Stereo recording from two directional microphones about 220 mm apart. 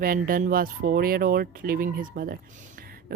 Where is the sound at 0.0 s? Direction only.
40° right (ahead or behind).